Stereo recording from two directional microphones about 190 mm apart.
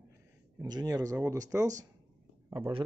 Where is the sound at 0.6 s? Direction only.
20° right (ahead or behind).